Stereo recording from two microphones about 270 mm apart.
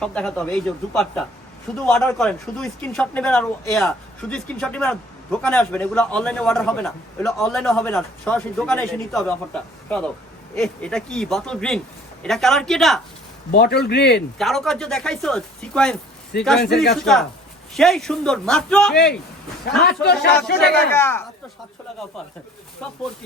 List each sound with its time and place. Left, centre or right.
0.0 s a man's voice: centre
10.5 s a man's voice: centre
13.5 s speech: left
14.3 s a man's voice: centre
16.6 s speech: left
16.9 s a man's voice: centre
19.8 s speech: left
20.7 s speech: centre
22.8 s a man's voice: centre